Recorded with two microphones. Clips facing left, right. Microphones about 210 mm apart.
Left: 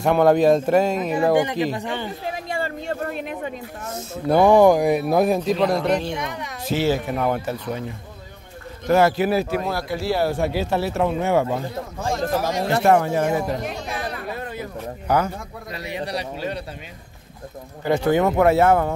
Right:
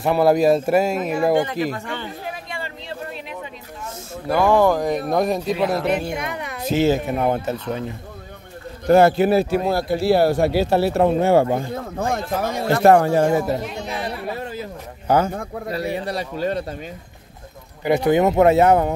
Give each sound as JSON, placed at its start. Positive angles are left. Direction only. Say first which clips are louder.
{"t": 0.0, "sound": "speech", "louder": "even", "side_deg": -5}
{"t": 1.3, "sound": "speech", "louder": "even", "side_deg": 15}
{"t": 2.5, "sound": "a sound", "louder": "left 6 dB", "side_deg": 45}
{"t": 4.3, "sound": "speech", "louder": "left 3 dB", "side_deg": 15}
{"t": 6.7, "sound": "a man's voice", "louder": "right 3 dB", "side_deg": -20}
{"t": 8.8, "sound": "a man's voice", "louder": "right 4 dB", "side_deg": -30}
{"t": 12.0, "sound": "speech", "louder": "even", "side_deg": -60}
{"t": 12.8, "sound": "speech", "louder": "right 5 dB", "side_deg": -40}
{"t": 14.4, "sound": "speech", "louder": "even", "side_deg": -25}
{"t": 15.7, "sound": "speech", "louder": "right 3 dB", "side_deg": -40}
{"t": 17.8, "sound": "a man's voice", "louder": "right 2 dB", "side_deg": -15}